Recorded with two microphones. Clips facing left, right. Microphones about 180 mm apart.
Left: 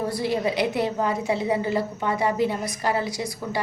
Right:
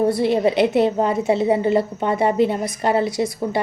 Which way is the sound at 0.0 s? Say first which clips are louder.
Right 7 dB; 25° right (ahead or behind).